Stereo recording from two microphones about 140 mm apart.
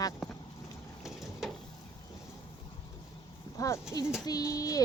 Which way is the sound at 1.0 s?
5° right (ahead or behind).